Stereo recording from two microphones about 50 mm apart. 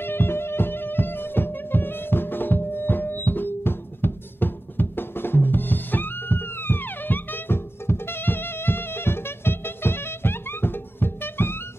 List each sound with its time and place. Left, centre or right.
0.0 s music: left